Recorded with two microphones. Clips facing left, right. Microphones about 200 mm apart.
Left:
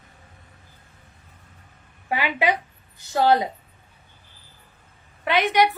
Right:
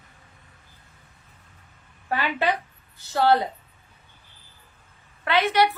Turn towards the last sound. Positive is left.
turn(degrees=15)  # may be behind; listen again after turning